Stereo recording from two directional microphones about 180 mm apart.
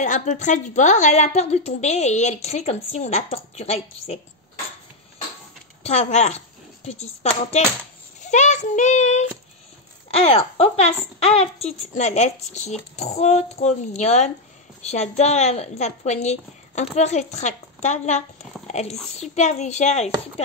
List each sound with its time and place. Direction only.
0.0 s a woman's voice: 40° left (ahead or behind)
5.9 s a woman's voice: 40° left (ahead or behind)
8.2 s a woman's voice: 40° left (ahead or behind)